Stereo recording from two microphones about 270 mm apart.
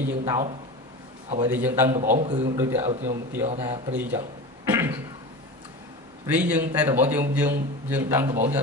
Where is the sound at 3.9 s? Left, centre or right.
Centre.